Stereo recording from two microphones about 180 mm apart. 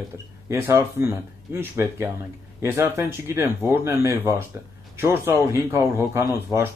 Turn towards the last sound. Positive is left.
turn(degrees=-15)  # may be behind; listen again after turning